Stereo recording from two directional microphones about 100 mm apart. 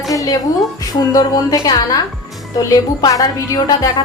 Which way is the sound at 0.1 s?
35° left (ahead or behind).